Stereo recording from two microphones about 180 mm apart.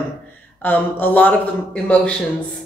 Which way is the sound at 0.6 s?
10° left (ahead or behind).